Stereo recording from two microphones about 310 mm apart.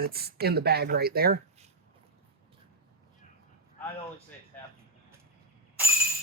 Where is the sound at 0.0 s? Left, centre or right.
Right.